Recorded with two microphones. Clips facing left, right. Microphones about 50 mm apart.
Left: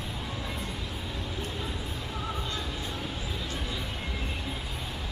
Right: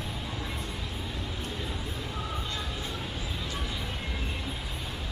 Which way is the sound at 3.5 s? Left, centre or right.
Right.